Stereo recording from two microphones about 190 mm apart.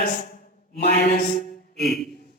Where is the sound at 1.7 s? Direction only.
Centre (ahead or behind).